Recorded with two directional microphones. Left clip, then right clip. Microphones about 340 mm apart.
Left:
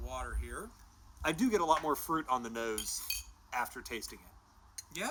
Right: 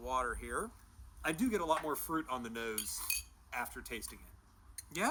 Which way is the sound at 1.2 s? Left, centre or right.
Centre.